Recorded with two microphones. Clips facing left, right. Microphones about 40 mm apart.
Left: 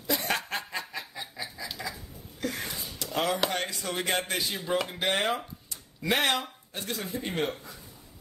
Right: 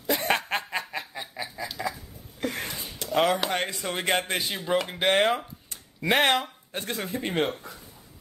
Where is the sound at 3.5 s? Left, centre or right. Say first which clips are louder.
Right 3 dB; right.